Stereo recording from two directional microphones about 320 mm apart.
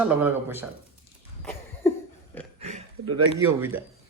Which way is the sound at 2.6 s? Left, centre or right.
Centre.